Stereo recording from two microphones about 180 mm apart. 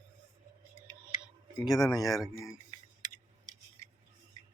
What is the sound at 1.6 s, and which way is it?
Speech, 20° left (ahead or behind).